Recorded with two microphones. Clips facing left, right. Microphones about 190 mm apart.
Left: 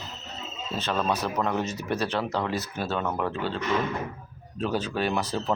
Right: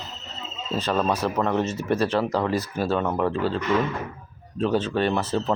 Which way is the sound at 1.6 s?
25° right (ahead or behind).